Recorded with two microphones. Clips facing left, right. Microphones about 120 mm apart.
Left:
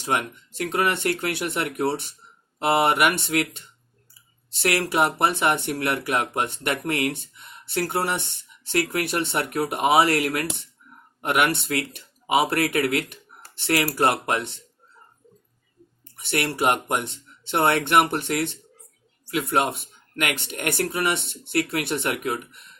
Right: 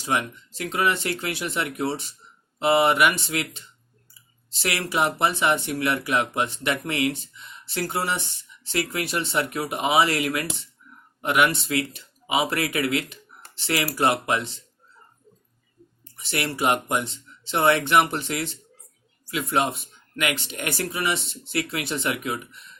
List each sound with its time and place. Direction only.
0.0 s speech: 50° left (ahead or behind)
4.6 s speech: 55° left (ahead or behind)
16.1 s speech: 55° left (ahead or behind)